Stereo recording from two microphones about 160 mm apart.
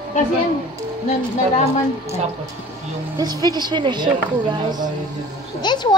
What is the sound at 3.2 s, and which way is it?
Speech, 25° right (ahead or behind).